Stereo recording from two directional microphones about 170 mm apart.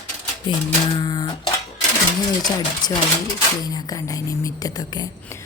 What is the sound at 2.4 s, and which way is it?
Speech, 25° left (ahead or behind).